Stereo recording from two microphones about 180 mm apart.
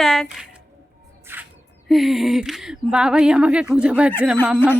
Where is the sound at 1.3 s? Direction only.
10° right (ahead or behind).